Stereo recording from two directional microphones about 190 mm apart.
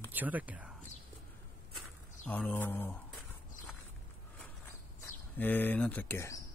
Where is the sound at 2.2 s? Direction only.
10° left (ahead or behind).